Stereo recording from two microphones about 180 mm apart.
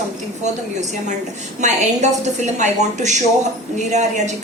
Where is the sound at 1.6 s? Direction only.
40° right (ahead or behind).